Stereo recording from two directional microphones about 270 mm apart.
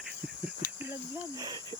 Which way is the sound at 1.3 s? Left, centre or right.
Centre.